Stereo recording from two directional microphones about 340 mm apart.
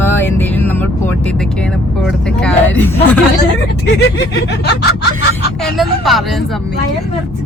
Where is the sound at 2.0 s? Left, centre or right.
Centre.